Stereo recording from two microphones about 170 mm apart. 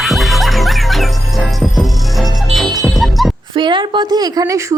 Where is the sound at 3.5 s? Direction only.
30° right (ahead or behind).